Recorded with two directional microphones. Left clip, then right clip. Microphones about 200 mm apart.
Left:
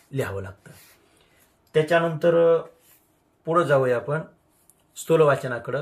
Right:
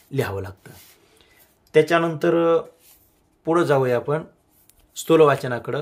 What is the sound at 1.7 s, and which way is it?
Speech, 50° right (ahead or behind).